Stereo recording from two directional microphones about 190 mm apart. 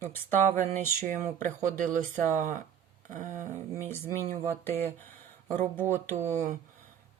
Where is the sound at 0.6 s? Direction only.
40° right (ahead or behind).